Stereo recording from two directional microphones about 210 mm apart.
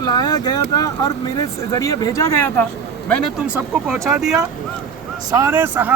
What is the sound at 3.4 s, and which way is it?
Speech, centre (ahead or behind).